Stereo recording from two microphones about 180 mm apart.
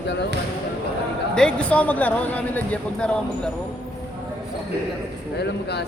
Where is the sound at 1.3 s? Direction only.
5° left (ahead or behind).